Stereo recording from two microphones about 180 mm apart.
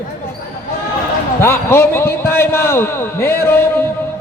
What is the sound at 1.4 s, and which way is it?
A man's voice, 15° left (ahead or behind).